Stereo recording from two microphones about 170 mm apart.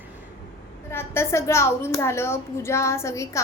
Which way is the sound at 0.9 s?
15° left (ahead or behind).